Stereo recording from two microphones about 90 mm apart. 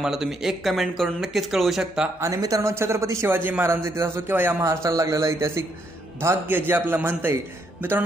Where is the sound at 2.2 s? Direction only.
40° right (ahead or behind).